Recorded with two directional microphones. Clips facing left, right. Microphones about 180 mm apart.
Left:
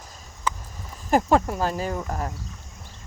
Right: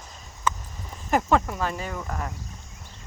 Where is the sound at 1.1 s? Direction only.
35° left (ahead or behind).